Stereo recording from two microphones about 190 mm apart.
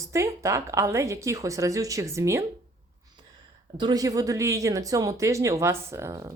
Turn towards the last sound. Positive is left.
turn(degrees=-15)  # may be behind; listen again after turning